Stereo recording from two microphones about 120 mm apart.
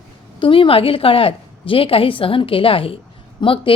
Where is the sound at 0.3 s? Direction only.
45° left (ahead or behind).